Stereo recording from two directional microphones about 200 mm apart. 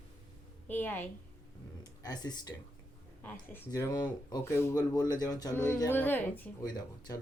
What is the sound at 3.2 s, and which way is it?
A woman's voice, 10° left (ahead or behind).